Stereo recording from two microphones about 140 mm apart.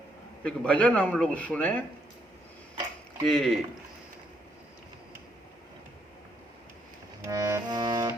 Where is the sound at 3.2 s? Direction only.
Centre (ahead or behind).